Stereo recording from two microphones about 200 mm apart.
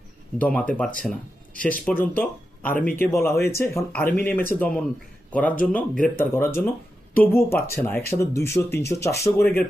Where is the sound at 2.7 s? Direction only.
40° left (ahead or behind).